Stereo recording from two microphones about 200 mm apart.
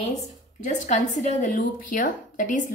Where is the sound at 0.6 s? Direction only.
35° left (ahead or behind).